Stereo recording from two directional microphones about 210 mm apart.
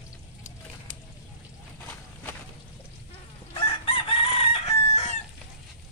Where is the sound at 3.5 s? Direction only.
25° left (ahead or behind).